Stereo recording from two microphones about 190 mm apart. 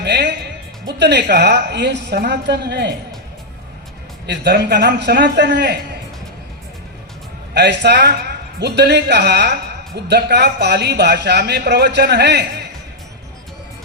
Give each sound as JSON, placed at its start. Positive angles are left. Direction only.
{"t": 0.0, "sound": "music", "side_deg": -65}
{"t": 0.9, "sound": "a woman's voice", "side_deg": -65}
{"t": 4.3, "sound": "a woman's voice", "side_deg": -65}
{"t": 7.5, "sound": "a woman's voice", "side_deg": -65}